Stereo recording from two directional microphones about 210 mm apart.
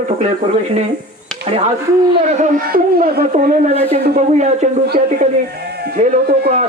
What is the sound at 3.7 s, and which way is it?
Speech, 30° right (ahead or behind).